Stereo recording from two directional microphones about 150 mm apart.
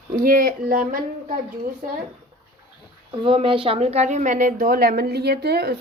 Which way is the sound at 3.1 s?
35° right (ahead or behind).